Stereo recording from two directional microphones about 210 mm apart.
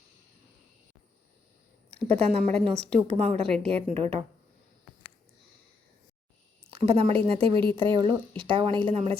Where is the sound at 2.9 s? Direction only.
30° right (ahead or behind).